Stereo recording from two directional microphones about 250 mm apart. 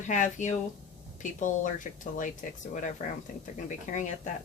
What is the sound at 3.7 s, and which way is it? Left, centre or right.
Speech, left.